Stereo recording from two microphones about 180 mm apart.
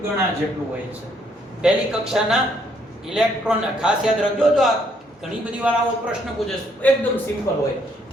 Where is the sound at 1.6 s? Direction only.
5° right (ahead or behind).